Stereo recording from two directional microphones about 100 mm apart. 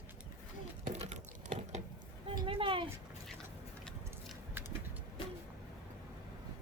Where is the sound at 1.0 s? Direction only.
90° right.